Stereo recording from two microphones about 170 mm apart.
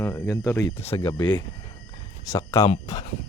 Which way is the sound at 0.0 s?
15° left (ahead or behind).